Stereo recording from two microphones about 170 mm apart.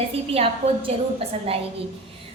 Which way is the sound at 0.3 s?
35° right (ahead or behind).